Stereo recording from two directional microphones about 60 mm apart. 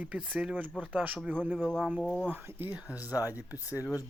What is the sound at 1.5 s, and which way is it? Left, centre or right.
Speech, centre.